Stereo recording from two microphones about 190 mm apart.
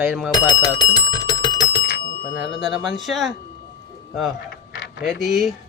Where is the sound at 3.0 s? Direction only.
Centre (ahead or behind).